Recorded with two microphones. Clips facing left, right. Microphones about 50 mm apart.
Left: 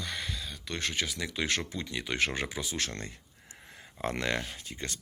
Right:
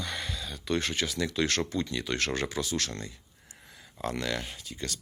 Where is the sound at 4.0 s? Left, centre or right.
Left.